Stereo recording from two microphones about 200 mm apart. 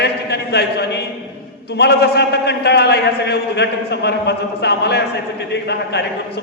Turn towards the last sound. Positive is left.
turn(degrees=55)  # may be behind; listen again after turning